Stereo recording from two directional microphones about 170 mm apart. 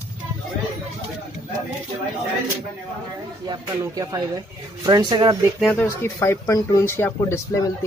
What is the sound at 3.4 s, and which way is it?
Speech, 20° right (ahead or behind).